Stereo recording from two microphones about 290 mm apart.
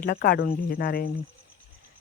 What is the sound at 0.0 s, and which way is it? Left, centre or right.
Speech, left.